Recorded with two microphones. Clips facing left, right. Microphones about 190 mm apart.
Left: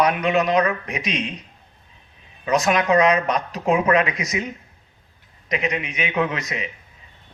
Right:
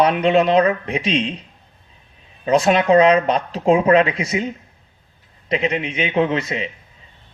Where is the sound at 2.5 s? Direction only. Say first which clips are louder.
Right 4 dB; 30° right (ahead or behind).